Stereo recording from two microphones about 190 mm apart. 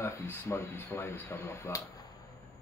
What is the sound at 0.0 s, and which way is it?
Speech, 15° left (ahead or behind).